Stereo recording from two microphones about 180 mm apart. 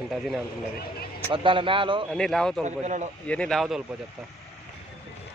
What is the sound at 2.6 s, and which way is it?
Speech, 40° right (ahead or behind).